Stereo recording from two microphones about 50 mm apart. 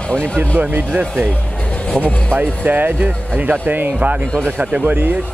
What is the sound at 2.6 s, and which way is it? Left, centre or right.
Speech, right.